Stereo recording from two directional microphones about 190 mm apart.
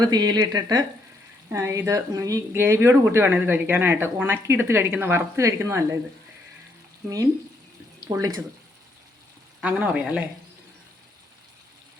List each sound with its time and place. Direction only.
0.0 s speech: 20° right (ahead or behind)
8.1 s speech: 20° right (ahead or behind)
9.6 s speech: 5° right (ahead or behind)